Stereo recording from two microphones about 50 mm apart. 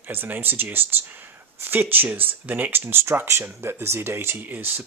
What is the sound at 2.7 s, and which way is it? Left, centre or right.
Speech, right.